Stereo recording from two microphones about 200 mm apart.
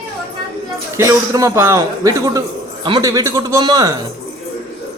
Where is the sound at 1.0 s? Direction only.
15° right (ahead or behind).